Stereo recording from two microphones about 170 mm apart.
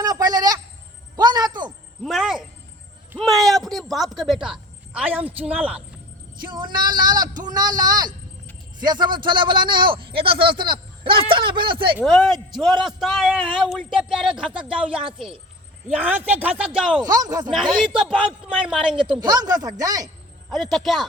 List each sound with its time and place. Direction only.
0.0 s a sound: 20° right (ahead or behind)
2.0 s a sound: centre (ahead or behind)
5.5 s a man's voice: 5° right (ahead or behind)
6.4 s speech: 25° right (ahead or behind)
12.0 s a man's voice: centre (ahead or behind)
17.0 s speech: 20° right (ahead or behind)
17.5 s a man's voice: centre (ahead or behind)
19.2 s speech: 25° right (ahead or behind)
20.5 s a man's voice: centre (ahead or behind)